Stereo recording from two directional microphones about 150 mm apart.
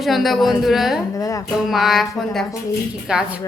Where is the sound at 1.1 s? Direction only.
25° left (ahead or behind).